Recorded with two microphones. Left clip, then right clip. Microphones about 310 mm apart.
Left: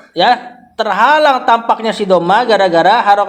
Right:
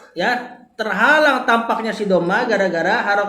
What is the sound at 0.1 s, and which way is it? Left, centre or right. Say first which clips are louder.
A man's voice: left 9 dB; left.